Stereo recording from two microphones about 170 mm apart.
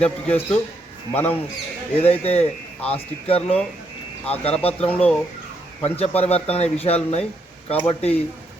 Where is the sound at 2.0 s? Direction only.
35° left (ahead or behind).